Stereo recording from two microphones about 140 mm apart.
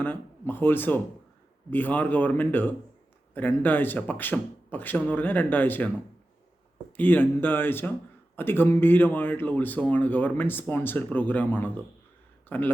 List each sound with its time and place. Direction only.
0.0 s speech: 15° left (ahead or behind)
6.9 s speech: 15° left (ahead or behind)